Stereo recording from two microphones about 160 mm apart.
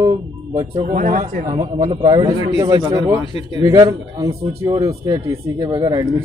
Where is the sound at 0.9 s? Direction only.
55° right (ahead or behind).